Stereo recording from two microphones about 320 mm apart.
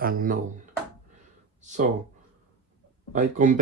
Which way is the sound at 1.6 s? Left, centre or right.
Right.